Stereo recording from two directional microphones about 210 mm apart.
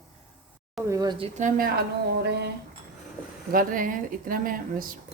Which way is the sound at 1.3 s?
40° right (ahead or behind).